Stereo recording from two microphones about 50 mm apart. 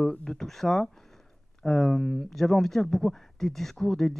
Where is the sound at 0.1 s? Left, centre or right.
Centre.